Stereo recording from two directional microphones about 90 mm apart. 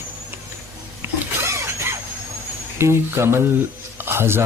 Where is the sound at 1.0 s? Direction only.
25° right (ahead or behind).